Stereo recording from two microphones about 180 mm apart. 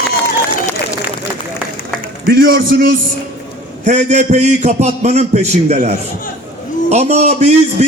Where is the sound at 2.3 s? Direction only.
55° right (ahead or behind).